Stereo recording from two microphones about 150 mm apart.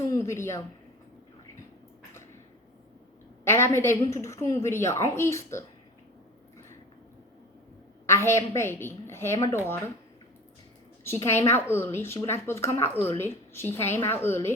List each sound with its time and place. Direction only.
0.0 s a sound: 20° left (ahead or behind)
3.4 s a woman's voice: 15° left (ahead or behind)
8.0 s a woman's voice: 20° left (ahead or behind)
11.0 s a woman's voice: 15° left (ahead or behind)